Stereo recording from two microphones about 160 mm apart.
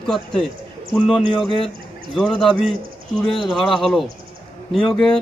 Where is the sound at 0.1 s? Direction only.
Centre (ahead or behind).